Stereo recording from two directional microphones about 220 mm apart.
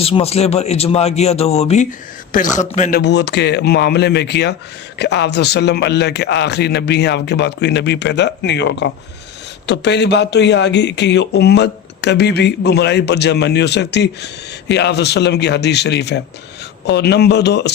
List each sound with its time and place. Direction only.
0.0 s a man's voice: 25° left (ahead or behind)
3.0 s a man's voice: 50° left (ahead or behind)